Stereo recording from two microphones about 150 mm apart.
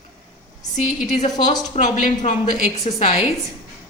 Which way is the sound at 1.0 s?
50° left (ahead or behind).